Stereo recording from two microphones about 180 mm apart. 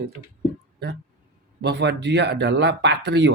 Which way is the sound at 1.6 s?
70° right (ahead or behind).